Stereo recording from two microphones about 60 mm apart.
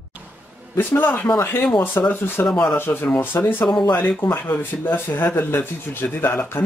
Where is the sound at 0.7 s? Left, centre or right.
Left.